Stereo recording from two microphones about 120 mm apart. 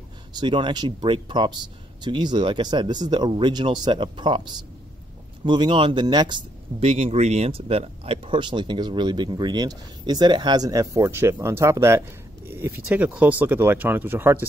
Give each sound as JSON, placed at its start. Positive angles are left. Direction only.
{"t": 0.3, "sound": "speech", "side_deg": -40}
{"t": 6.8, "sound": "speech", "side_deg": -55}
{"t": 12.4, "sound": "a sound", "side_deg": -20}
{"t": 12.8, "sound": "speech", "side_deg": -10}